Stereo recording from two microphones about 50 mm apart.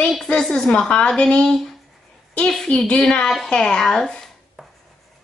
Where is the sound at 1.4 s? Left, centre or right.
Centre.